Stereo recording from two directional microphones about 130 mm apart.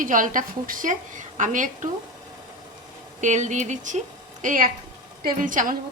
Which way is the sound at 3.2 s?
70° right (ahead or behind).